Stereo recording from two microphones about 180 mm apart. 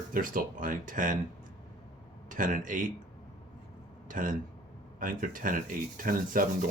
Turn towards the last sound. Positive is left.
turn(degrees=-50)  # may be behind; listen again after turning